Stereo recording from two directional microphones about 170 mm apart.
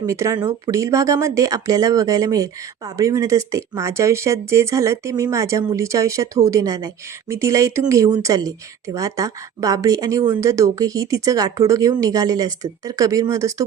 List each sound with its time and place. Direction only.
0.0 s speech: 20° right (ahead or behind)